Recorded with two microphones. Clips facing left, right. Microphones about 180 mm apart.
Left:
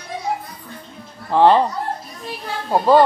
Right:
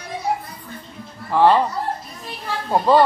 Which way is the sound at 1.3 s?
20° left (ahead or behind).